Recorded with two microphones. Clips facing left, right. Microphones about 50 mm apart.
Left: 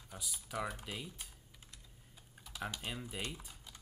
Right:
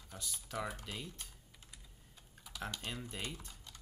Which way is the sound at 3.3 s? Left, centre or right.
Centre.